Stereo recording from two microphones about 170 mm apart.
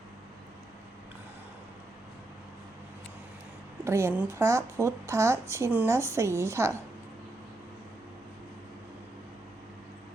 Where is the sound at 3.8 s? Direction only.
15° right (ahead or behind).